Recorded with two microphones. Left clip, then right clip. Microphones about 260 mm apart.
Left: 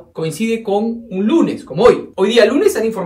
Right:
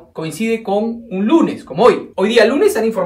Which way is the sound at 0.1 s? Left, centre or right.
Centre.